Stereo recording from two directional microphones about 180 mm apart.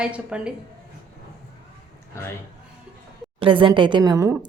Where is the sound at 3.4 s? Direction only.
30° right (ahead or behind).